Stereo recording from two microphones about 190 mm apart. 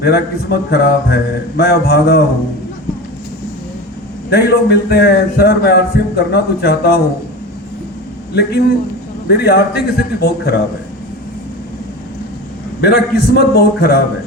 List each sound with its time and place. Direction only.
0.0 s a man's voice: 55° left (ahead or behind)
4.3 s a man's voice: 55° left (ahead or behind)
8.3 s a man's voice: 55° left (ahead or behind)
12.8 s a man's voice: 55° left (ahead or behind)